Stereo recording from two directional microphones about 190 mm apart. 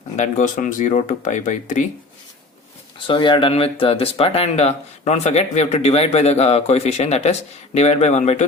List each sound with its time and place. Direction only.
0.2 s speech: 40° left (ahead or behind)
3.1 s speech: 25° left (ahead or behind)